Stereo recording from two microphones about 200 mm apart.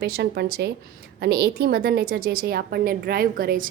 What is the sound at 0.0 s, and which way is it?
A woman's voice, 55° right (ahead or behind).